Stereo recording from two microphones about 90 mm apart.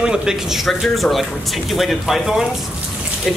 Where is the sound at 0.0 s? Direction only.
5° right (ahead or behind).